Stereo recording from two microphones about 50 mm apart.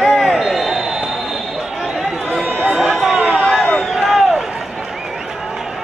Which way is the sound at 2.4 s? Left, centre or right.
Right.